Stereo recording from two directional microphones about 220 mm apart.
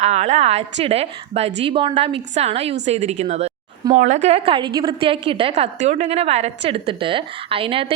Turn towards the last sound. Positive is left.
turn(degrees=-25)  # may be behind; listen again after turning